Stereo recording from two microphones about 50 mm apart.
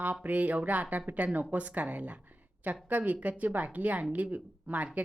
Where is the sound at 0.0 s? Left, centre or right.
Right.